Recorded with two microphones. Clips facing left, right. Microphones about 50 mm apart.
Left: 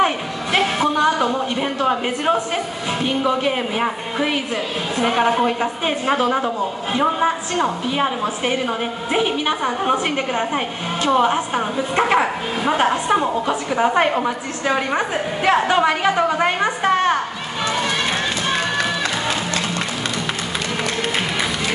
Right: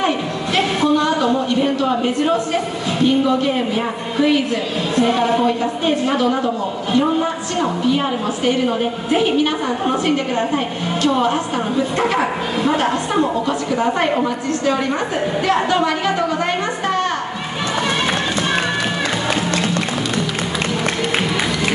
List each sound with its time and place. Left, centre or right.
0.5 s a sound: left
3.3 s a woman's voice: left
8.5 s a woman's voice: left
12.6 s a woman's voice: left